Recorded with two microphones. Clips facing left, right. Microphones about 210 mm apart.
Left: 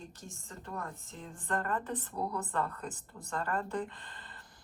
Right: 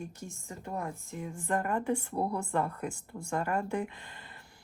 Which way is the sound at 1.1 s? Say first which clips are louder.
Right 4 dB; 15° right (ahead or behind).